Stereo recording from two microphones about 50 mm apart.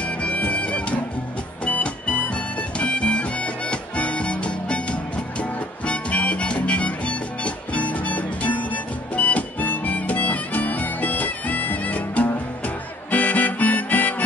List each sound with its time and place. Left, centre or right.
0.0 s music: left
9.1 s harmonica: left